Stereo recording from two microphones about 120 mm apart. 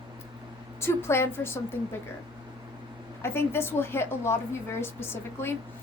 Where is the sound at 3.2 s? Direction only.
20° left (ahead or behind).